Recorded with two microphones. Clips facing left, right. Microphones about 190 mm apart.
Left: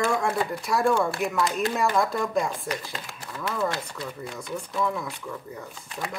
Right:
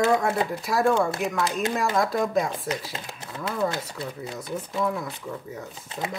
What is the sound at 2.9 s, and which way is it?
Speech, 20° right (ahead or behind).